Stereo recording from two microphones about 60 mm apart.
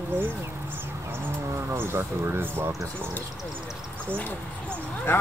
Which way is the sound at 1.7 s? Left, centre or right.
Right.